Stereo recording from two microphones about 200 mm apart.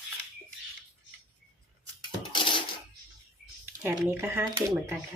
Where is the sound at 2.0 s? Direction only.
25° left (ahead or behind).